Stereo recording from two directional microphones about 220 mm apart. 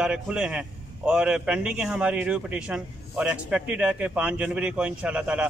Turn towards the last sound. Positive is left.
turn(degrees=-5)  # may be behind; listen again after turning